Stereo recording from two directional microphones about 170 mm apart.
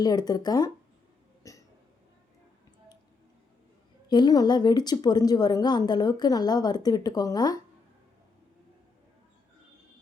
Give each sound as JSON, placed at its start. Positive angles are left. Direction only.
{"t": 0.0, "sound": "a woman's voice", "side_deg": 25}
{"t": 1.5, "sound": "hiccup", "side_deg": 20}
{"t": 4.1, "sound": "a woman's voice", "side_deg": 25}